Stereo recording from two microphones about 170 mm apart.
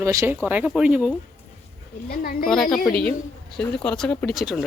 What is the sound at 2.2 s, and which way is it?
Speech, 60° left (ahead or behind).